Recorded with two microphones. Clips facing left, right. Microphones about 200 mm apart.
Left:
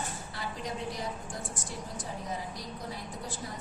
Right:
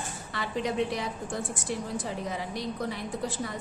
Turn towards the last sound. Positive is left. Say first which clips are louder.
# right 8 dB
turn(degrees=-75)  # may be behind; listen again after turning